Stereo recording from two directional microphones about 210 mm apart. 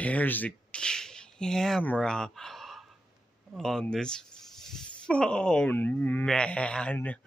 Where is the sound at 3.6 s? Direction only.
Centre (ahead or behind).